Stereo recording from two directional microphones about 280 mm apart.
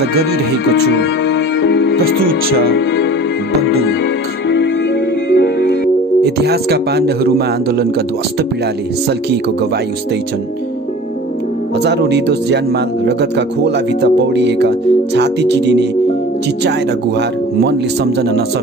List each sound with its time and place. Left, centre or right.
0.9 s music: left
5.3 s music: left
6.2 s speech: right
11.8 s speech: right
17.6 s speech: right